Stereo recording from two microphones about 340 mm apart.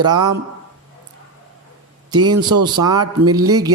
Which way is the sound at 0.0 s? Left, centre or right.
Centre.